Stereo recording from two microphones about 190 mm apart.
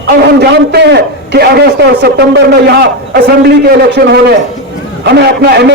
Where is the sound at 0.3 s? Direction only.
60° right (ahead or behind).